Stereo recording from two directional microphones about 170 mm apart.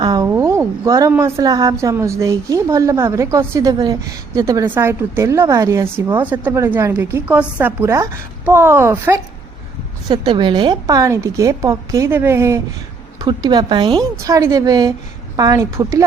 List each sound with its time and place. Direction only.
0.0 s a sound: 25° right (ahead or behind)
1.1 s a woman's voice: 20° right (ahead or behind)
10.1 s a woman's voice: 25° right (ahead or behind)